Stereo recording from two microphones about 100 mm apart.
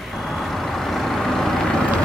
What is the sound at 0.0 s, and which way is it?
Vehicle, centre (ahead or behind).